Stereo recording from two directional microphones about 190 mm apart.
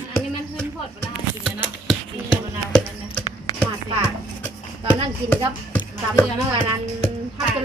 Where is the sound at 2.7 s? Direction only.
5° left (ahead or behind).